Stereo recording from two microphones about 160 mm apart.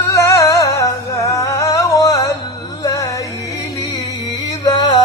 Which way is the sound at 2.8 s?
20° left (ahead or behind).